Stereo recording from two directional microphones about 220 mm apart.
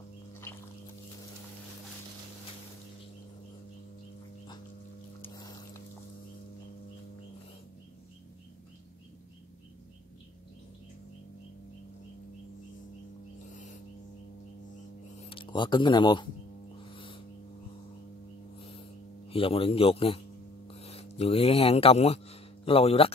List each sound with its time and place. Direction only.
5.2 s music: 15° left (ahead or behind)
15.2 s speech: 20° left (ahead or behind)
16.9 s a sound: 25° left (ahead or behind)
19.2 s a man's voice: 25° left (ahead or behind)